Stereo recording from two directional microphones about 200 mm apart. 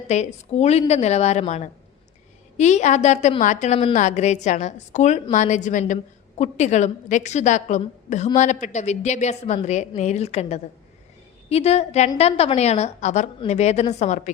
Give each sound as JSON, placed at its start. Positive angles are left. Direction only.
{"t": 0.1, "sound": "a woman's voice", "side_deg": 35}